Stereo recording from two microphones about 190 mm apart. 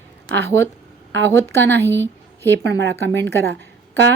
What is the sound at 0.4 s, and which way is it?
A woman's voice, 15° left (ahead or behind).